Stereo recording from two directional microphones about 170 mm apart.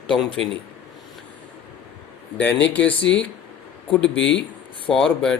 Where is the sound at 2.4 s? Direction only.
10° left (ahead or behind).